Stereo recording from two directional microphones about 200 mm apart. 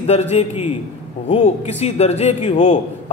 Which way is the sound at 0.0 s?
30° left (ahead or behind).